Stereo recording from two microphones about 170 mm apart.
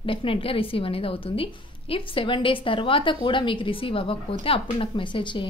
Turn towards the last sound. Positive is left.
turn(degrees=30)  # may be behind; listen again after turning